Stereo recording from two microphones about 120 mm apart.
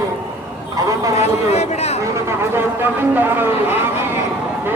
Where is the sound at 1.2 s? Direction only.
65° left (ahead or behind).